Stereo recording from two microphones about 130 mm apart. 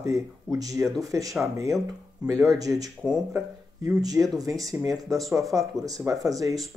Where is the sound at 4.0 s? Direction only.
30° right (ahead or behind).